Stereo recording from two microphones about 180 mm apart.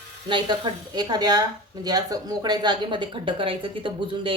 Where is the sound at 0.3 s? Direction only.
25° right (ahead or behind).